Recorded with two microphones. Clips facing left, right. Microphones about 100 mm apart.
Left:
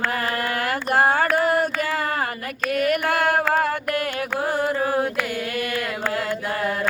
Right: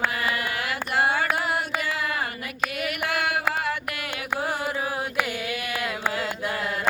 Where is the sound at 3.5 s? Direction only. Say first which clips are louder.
Left 6 dB; 45° left (ahead or behind).